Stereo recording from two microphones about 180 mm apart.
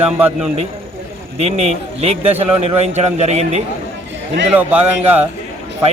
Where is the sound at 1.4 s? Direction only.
35° right (ahead or behind).